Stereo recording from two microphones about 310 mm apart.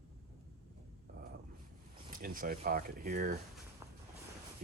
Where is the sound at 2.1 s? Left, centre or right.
Right.